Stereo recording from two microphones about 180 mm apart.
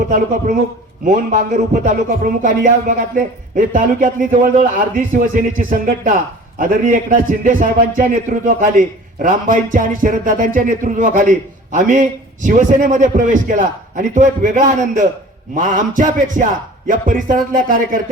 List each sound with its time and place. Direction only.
1.0 s speech: 45° right (ahead or behind)